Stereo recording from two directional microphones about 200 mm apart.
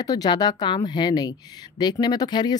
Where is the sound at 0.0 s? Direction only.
20° left (ahead or behind).